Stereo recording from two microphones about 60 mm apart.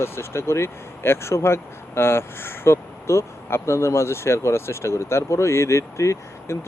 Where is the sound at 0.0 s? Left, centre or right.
Left.